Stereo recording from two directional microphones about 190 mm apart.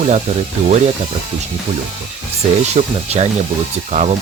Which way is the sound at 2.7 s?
35° right (ahead or behind).